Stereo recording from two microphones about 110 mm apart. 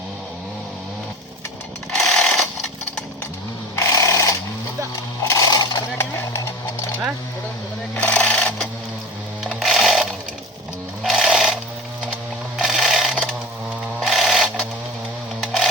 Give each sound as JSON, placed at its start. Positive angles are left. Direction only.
{"t": 1.9, "sound": "sewing machine", "side_deg": 5}
{"t": 3.8, "sound": "a sound", "side_deg": 30}
{"t": 6.1, "sound": "vehicle", "side_deg": 25}
{"t": 7.9, "sound": "sewing machine", "side_deg": 10}
{"t": 9.4, "sound": "music", "side_deg": -5}
{"t": 11.0, "sound": "sewing machine", "side_deg": -5}
{"t": 12.5, "sound": "a sound", "side_deg": 0}
{"t": 14.0, "sound": "sewing machine", "side_deg": 0}